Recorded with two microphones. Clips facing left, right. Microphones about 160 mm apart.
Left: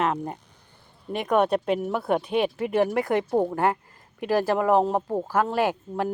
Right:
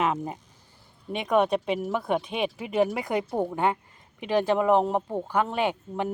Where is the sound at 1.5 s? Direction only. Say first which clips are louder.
Left 2 dB; 55° left (ahead or behind).